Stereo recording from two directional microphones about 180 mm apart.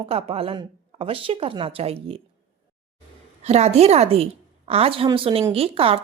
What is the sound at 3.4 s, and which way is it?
Speech, 35° right (ahead or behind).